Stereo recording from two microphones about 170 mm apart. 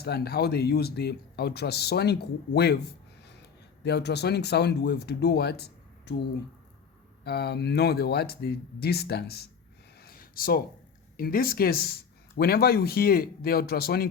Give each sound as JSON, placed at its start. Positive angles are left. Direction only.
{"t": 0.0, "sound": "speech", "side_deg": 70}
{"t": 3.8, "sound": "speech", "side_deg": 80}
{"t": 7.3, "sound": "speech", "side_deg": 70}
{"t": 10.0, "sound": "a sound", "side_deg": 60}
{"t": 11.2, "sound": "speech", "side_deg": 60}